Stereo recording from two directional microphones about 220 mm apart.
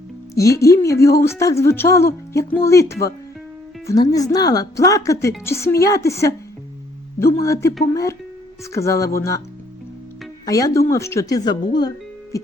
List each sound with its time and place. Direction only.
0.3 s speech: 15° left (ahead or behind)
7.4 s speech: 15° left (ahead or behind)
8.7 s speech: 15° left (ahead or behind)
10.4 s speech: 15° left (ahead or behind)